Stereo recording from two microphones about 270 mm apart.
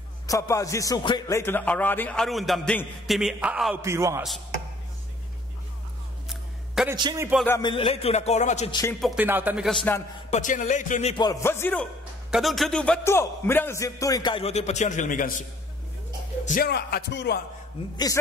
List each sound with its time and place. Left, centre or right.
0.3 s a man's voice: centre
6.2 s a sound: centre
7.0 s speech: centre
7.3 s music: centre; by 8.6 s left
9.0 s a man's voice: centre
10.3 s a man's voice: left
16.4 s speech: left